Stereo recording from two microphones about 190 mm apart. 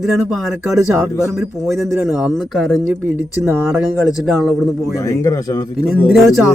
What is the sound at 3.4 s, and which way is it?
Speech, 15° right (ahead or behind).